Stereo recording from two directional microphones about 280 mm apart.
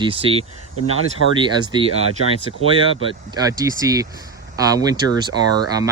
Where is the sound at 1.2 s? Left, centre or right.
Left.